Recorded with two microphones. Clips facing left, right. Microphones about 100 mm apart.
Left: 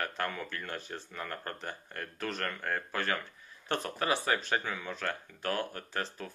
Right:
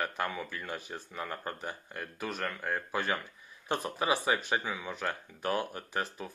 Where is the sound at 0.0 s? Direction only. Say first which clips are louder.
Right 1 dB; 10° right (ahead or behind).